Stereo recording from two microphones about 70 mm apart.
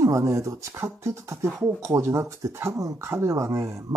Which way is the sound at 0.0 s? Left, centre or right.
Right.